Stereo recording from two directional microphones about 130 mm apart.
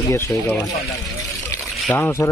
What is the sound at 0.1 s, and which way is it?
Speech, 25° left (ahead or behind).